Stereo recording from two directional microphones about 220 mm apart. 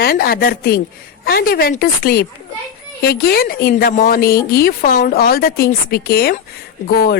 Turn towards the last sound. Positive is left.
turn(degrees=45)  # may be behind; listen again after turning